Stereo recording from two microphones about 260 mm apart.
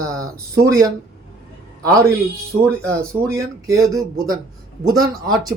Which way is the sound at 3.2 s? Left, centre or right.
Centre.